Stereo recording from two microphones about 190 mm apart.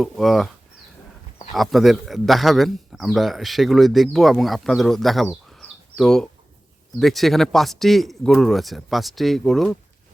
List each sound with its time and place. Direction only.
0.0 s speech: centre (ahead or behind)
1.5 s speech: centre (ahead or behind)